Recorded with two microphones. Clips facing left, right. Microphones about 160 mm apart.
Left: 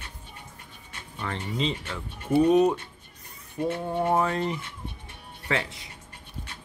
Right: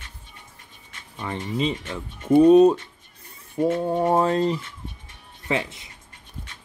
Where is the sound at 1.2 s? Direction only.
15° right (ahead or behind).